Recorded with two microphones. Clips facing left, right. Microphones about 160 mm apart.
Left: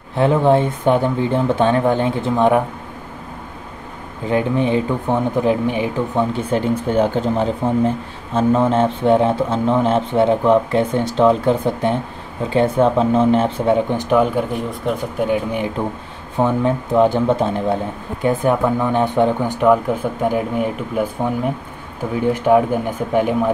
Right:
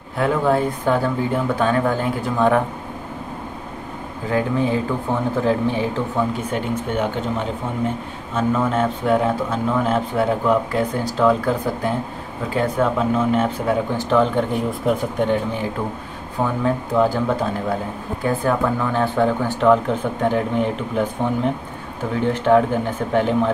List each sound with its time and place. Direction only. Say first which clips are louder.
0.2 s speech: left 4 dB; 25° left (ahead or behind)
4.3 s speech: left 3 dB; 20° left (ahead or behind)
6.5 s speech: left 5 dB; 35° left (ahead or behind)
14.0 s speech: right 2 dB; 10° left (ahead or behind)
16.3 s speech: left 4 dB; 20° left (ahead or behind)
22.2 s speech: left 2 dB; 10° left (ahead or behind)